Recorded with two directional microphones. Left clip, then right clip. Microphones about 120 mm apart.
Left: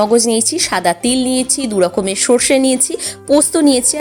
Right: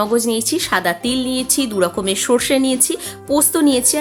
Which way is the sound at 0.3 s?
35° left (ahead or behind).